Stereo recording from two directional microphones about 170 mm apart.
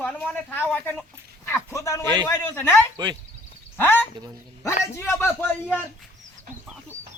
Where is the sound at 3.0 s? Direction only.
25° right (ahead or behind).